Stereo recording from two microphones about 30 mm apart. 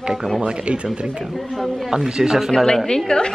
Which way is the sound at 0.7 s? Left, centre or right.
Right.